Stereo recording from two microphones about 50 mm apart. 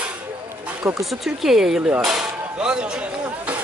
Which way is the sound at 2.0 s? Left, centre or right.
Centre.